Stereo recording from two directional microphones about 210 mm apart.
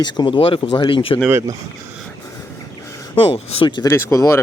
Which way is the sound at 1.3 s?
10° right (ahead or behind).